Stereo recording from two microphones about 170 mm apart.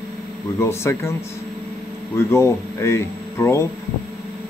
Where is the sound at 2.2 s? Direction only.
15° left (ahead or behind).